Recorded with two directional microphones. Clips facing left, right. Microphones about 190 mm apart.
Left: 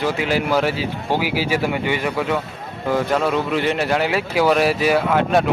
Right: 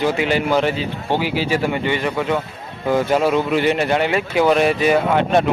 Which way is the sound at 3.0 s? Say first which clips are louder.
Right 3 dB; 5° right (ahead or behind).